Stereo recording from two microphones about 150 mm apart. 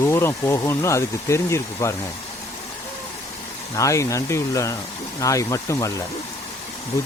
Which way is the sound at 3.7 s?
20° left (ahead or behind).